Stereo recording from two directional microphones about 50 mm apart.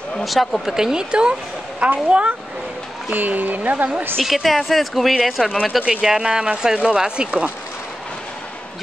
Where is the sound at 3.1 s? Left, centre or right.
Right.